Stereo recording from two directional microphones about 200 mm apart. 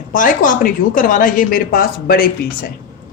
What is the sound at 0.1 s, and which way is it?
A woman's voice, 40° left (ahead or behind).